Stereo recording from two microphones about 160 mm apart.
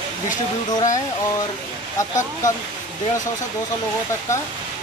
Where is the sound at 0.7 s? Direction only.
20° left (ahead or behind).